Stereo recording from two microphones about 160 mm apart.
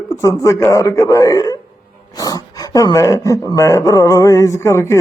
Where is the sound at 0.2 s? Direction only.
20° left (ahead or behind).